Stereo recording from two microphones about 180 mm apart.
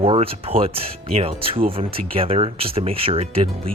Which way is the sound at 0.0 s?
30° right (ahead or behind).